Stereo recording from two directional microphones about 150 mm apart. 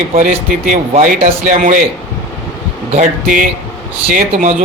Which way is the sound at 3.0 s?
60° right (ahead or behind).